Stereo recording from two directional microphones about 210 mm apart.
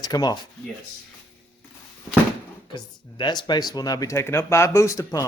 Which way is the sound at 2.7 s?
20° left (ahead or behind).